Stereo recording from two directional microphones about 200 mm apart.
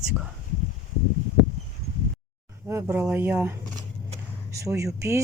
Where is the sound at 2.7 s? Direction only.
15° right (ahead or behind).